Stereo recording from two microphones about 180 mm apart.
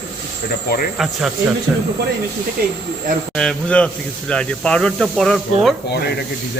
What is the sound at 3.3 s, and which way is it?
Speech, 5° left (ahead or behind).